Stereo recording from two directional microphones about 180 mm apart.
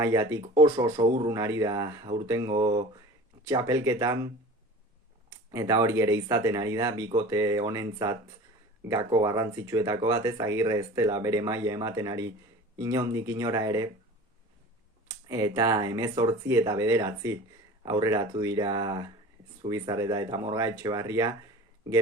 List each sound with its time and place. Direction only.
0.0 s speech: 15° right (ahead or behind)
5.5 s speech: 20° right (ahead or behind)
15.3 s speech: 20° right (ahead or behind)